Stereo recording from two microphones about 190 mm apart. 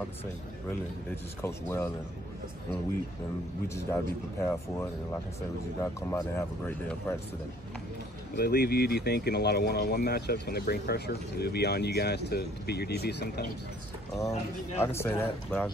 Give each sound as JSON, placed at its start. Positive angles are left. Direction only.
{"t": 1.4, "sound": "speech", "side_deg": 15}
{"t": 3.6, "sound": "speech", "side_deg": 15}
{"t": 8.4, "sound": "speech", "side_deg": 60}
{"t": 14.8, "sound": "speech", "side_deg": 10}